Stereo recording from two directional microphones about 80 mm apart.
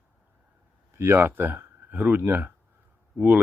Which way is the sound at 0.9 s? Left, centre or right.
Right.